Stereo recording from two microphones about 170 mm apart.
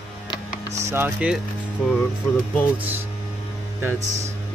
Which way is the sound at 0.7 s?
15° right (ahead or behind).